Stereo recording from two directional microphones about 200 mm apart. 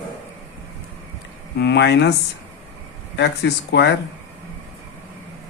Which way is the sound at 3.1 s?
55° left (ahead or behind).